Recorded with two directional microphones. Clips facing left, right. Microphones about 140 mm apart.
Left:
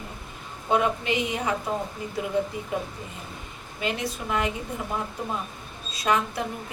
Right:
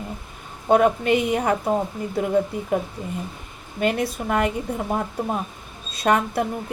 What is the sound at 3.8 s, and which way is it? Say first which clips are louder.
Speech: right 7 dB; 55° right (ahead or behind).